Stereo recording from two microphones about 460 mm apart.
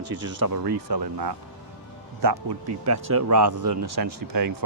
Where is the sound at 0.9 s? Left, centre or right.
Right.